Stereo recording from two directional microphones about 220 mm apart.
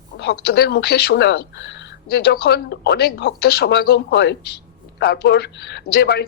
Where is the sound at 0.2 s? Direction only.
45° left (ahead or behind).